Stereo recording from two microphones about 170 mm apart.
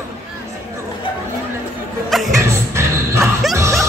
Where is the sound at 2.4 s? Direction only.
15° right (ahead or behind).